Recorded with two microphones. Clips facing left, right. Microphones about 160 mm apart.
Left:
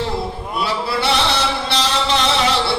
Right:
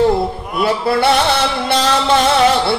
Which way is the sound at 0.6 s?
55° right (ahead or behind).